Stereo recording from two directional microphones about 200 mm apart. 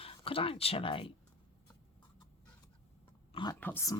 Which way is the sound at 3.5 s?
10° left (ahead or behind).